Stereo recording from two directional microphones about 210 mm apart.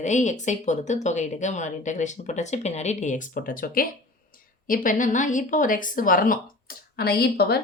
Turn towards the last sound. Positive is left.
turn(degrees=50)  # may be behind; listen again after turning